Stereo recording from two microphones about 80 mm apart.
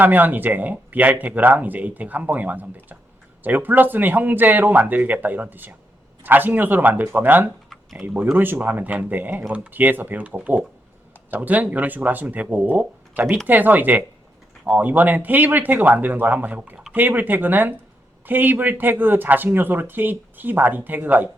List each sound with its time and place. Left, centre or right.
0.0 s speech: right
7.7 s typing: centre
8.0 s speech: right